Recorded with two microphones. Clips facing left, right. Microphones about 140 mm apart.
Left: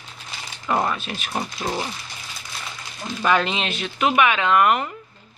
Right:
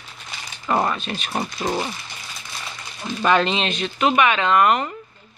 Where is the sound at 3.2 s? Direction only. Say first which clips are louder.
Right 2 dB; 10° left (ahead or behind).